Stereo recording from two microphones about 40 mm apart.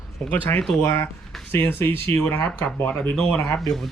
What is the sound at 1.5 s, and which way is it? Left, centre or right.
Speech, left.